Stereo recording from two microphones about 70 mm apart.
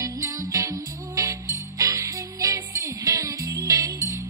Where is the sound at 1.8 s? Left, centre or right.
Right.